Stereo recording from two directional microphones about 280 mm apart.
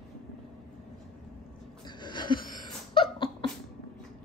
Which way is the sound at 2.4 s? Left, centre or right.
Centre.